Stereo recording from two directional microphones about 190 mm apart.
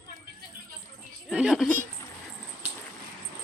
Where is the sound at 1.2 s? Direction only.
5° right (ahead or behind).